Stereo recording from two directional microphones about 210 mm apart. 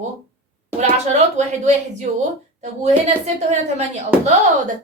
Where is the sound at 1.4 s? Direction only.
35° right (ahead or behind).